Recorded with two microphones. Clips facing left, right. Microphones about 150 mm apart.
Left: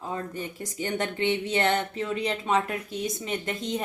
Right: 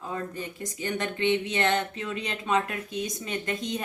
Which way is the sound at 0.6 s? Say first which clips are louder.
Left 1 dB; 30° left (ahead or behind).